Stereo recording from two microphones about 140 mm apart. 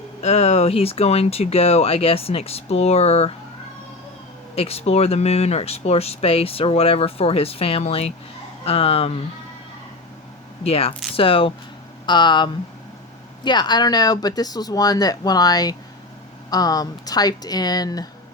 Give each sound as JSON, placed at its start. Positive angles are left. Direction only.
{"t": 0.2, "sound": "speech", "side_deg": 50}
{"t": 4.5, "sound": "speech", "side_deg": 45}
{"t": 10.6, "sound": "speech", "side_deg": 45}